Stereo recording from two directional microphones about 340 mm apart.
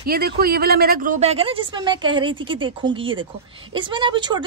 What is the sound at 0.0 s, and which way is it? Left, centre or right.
A woman's voice, right.